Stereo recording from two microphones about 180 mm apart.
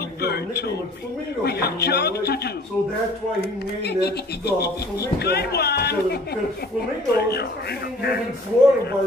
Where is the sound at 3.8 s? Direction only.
65° left (ahead or behind).